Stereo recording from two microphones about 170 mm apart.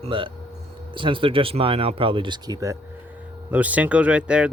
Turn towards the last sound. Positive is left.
turn(degrees=-5)  # may be behind; listen again after turning